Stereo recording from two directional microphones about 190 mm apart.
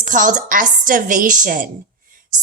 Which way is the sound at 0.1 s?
45° right (ahead or behind).